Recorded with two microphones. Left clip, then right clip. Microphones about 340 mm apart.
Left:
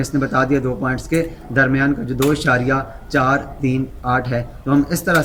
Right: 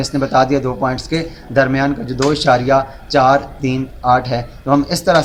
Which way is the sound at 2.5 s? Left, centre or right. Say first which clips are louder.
Right 5 dB; centre.